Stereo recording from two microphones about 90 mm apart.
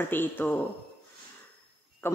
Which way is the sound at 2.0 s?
25° left (ahead or behind).